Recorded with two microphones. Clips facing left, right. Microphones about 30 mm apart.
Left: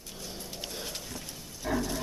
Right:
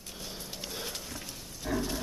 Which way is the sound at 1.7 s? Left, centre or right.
Centre.